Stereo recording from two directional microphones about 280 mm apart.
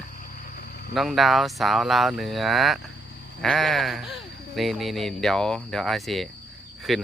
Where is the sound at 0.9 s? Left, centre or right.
Centre.